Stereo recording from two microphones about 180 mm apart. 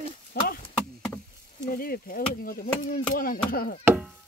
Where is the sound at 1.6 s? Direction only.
55° left (ahead or behind).